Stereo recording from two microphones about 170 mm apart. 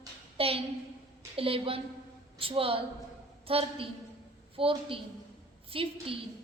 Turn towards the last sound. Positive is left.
turn(degrees=-35)  # may be behind; listen again after turning